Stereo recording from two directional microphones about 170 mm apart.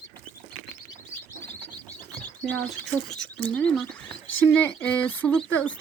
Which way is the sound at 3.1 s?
10° left (ahead or behind).